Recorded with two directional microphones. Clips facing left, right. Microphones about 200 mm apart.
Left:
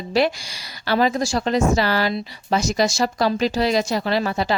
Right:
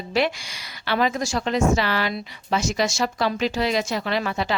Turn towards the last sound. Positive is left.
turn(degrees=35)  # may be behind; listen again after turning